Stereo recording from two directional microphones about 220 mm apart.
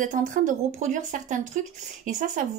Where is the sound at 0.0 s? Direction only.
35° right (ahead or behind).